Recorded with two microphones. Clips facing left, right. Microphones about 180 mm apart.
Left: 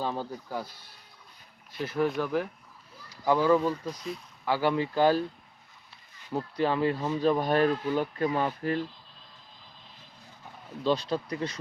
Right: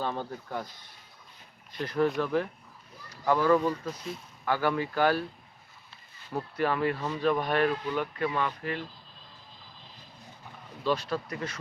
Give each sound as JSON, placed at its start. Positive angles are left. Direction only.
{"t": 0.0, "sound": "speech", "side_deg": 10}
{"t": 1.7, "sound": "speech", "side_deg": 5}
{"t": 3.6, "sound": "speech", "side_deg": 0}
{"t": 4.4, "sound": "speech", "side_deg": 15}
{"t": 6.6, "sound": "speech", "side_deg": 25}
{"t": 10.8, "sound": "speech", "side_deg": 25}